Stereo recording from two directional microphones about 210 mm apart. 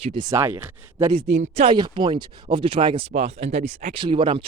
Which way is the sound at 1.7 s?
20° right (ahead or behind).